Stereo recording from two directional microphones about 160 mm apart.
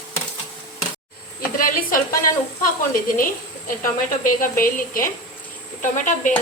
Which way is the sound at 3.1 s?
60° left (ahead or behind).